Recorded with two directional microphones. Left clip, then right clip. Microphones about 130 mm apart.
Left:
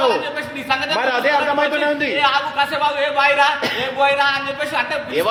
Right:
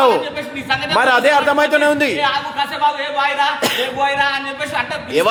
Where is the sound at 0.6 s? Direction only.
10° right (ahead or behind).